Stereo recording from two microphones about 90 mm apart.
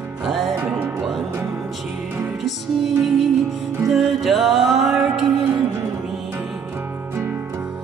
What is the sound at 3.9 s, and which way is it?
Music, centre (ahead or behind).